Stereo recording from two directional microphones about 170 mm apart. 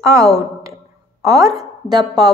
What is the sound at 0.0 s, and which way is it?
A woman's voice, 20° right (ahead or behind).